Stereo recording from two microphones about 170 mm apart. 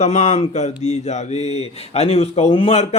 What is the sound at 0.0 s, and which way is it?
Speech, 45° left (ahead or behind).